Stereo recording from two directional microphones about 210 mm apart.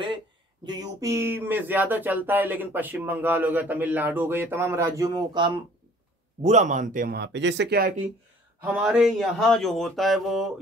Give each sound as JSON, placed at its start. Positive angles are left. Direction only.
{"t": 0.7, "sound": "speech", "side_deg": -15}
{"t": 6.4, "sound": "speech", "side_deg": -35}
{"t": 8.7, "sound": "speech", "side_deg": -5}